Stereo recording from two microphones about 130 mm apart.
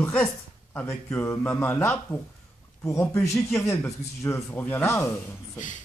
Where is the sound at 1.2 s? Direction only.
20° left (ahead or behind).